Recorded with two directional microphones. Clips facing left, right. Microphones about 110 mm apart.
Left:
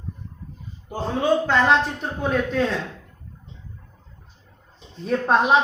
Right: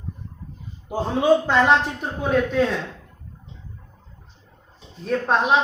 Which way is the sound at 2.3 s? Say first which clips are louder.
Right 3 dB; centre (ahead or behind).